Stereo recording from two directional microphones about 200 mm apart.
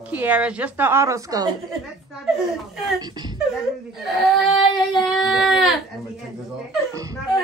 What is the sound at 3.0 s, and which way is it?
Speech, 20° right (ahead or behind).